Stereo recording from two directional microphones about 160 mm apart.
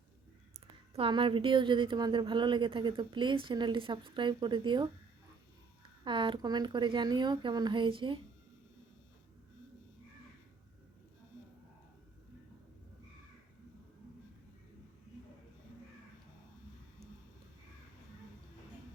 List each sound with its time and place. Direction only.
0.9 s a woman's voice: 35° right (ahead or behind)
6.1 s a woman's voice: 30° right (ahead or behind)